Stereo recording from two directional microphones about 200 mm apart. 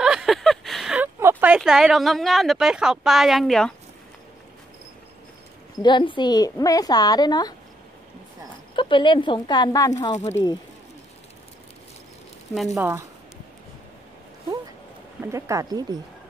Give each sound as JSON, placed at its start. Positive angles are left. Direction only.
{"t": 0.0, "sound": "a sound", "side_deg": 0}
{"t": 5.8, "sound": "a woman's voice", "side_deg": 25}
{"t": 8.7, "sound": "a woman's voice", "side_deg": 25}
{"t": 12.7, "sound": "speech", "side_deg": -10}
{"t": 15.2, "sound": "speech", "side_deg": -15}